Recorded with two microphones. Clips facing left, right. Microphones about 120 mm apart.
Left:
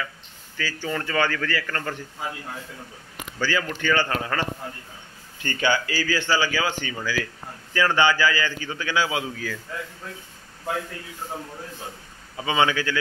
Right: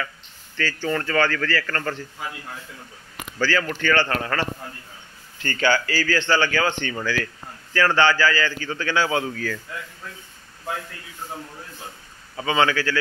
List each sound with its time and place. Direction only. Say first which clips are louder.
0.6 s a man's voice: right 4 dB; 10° left (ahead or behind)
3.3 s a man's voice: right 3 dB; 15° left (ahead or behind)
12.4 s a man's voice: right 1 dB; 20° left (ahead or behind)